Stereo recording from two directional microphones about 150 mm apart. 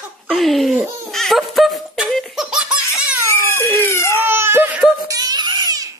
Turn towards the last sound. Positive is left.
turn(degrees=-25)  # may be behind; listen again after turning